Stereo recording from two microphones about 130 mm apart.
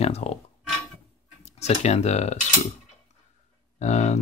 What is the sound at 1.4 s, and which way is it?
Speech, 55° left (ahead or behind).